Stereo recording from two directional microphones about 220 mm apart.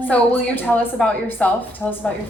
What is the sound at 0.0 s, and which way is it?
A woman's voice, 10° left (ahead or behind).